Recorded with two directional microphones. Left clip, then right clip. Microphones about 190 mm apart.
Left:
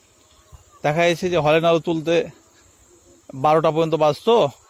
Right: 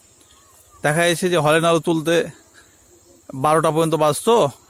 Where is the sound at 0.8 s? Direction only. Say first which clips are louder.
Right 1 dB; 10° right (ahead or behind).